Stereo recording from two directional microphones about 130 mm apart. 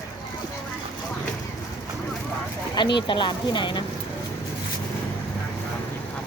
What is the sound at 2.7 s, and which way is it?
Speech, 35° left (ahead or behind).